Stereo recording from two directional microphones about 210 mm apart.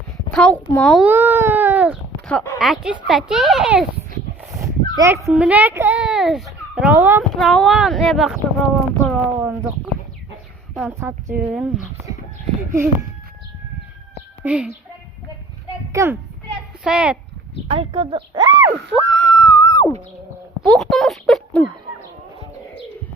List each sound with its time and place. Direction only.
0.3 s a child's voice: 5° left (ahead or behind)
2.2 s speech: 10° left (ahead or behind)
4.5 s speech: 15° right (ahead or behind)
7.3 s a child's voice: centre (ahead or behind)
14.4 s speech: 5° right (ahead or behind)
15.9 s a child's voice: 15° right (ahead or behind)
17.7 s speech: 25° right (ahead or behind)
18.9 s a sound: 5° left (ahead or behind)